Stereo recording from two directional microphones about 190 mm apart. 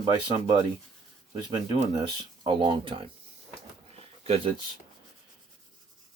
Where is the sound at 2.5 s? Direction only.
25° right (ahead or behind).